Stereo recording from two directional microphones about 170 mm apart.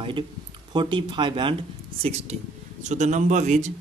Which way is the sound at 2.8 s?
45° right (ahead or behind).